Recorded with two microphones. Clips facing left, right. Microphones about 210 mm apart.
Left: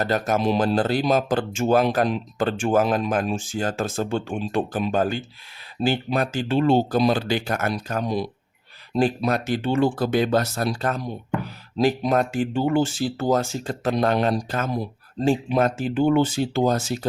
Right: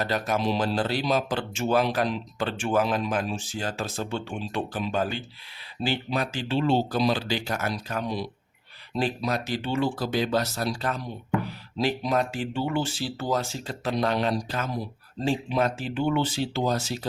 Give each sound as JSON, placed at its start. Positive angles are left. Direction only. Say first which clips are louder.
{"t": 0.0, "sound": "speech", "louder": "left 4 dB", "side_deg": 45}